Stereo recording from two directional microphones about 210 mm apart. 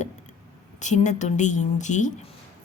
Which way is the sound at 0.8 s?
35° left (ahead or behind).